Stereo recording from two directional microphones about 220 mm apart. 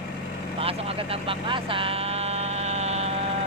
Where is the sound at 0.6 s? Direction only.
25° right (ahead or behind).